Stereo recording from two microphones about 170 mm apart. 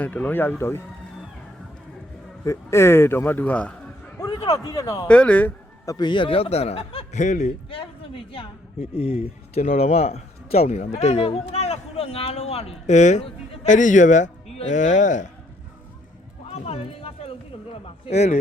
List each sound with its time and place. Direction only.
0.0 s speech: 10° left (ahead or behind)
2.4 s a man's voice: 15° left (ahead or behind)
4.2 s speech: 20° left (ahead or behind)
5.0 s a man's voice: 5° left (ahead or behind); by 7.5 s 45° left (ahead or behind)
7.7 s a man's voice: 30° left (ahead or behind); by 15.3 s 45° left (ahead or behind)
16.5 s music: 35° left (ahead or behind)
17.8 s a man's voice: 35° left (ahead or behind)